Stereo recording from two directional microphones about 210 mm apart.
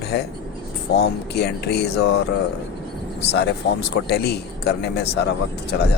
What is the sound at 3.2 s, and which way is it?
Speech, 50° left (ahead or behind).